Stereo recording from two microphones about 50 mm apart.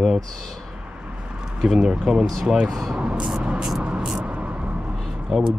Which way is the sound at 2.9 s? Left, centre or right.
Right.